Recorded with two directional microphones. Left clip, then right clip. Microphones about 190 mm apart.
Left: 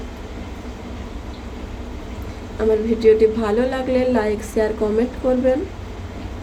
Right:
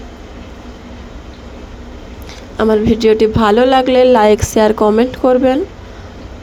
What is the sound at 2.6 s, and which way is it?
A woman's voice, 50° right (ahead or behind).